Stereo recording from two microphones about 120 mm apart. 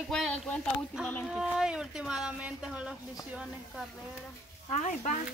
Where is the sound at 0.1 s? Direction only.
5° left (ahead or behind).